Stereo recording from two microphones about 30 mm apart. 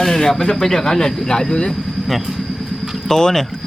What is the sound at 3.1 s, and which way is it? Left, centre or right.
Speech, centre.